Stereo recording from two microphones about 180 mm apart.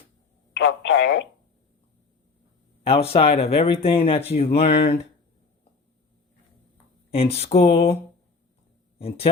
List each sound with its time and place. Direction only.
0.5 s speech: 90° left
2.8 s speech: 35° left (ahead or behind)
7.1 s speech: 35° left (ahead or behind)
9.0 s speech: 35° left (ahead or behind)